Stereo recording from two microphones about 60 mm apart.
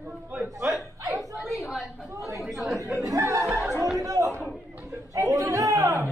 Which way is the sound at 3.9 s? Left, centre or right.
Right.